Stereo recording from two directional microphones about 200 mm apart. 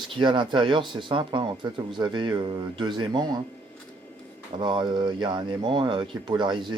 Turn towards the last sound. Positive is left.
turn(degrees=-20)  # may be behind; listen again after turning